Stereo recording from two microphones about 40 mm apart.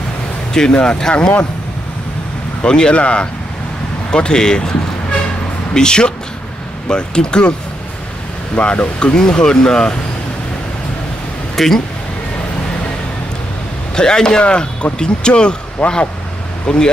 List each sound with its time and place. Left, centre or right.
0.6 s speech: left
2.6 s speech: centre
2.9 s speech: left
8.6 s speech: left
11.5 s speech: centre
13.9 s speech: centre
15.8 s speech: left
16.6 s speech: left